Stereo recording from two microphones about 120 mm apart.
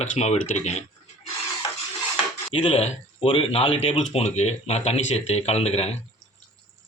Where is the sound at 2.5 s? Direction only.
60° left (ahead or behind).